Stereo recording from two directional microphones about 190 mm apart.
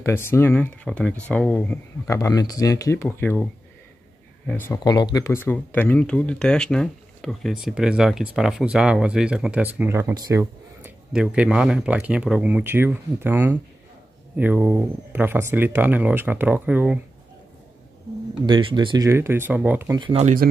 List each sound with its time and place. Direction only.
0.0 s speech: 10° left (ahead or behind)
2.1 s speech: 20° left (ahead or behind)
4.5 s speech: 10° left (ahead or behind)
4.7 s speech: 20° left (ahead or behind); by 10.9 s 15° right (ahead or behind)
11.1 s speech: 5° right (ahead or behind)
18.4 s speech: 25° right (ahead or behind); by 20.0 s 10° right (ahead or behind)
20.0 s speech: 30° right (ahead or behind)